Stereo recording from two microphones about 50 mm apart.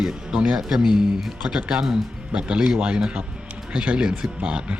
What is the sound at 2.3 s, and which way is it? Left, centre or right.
Speech, right.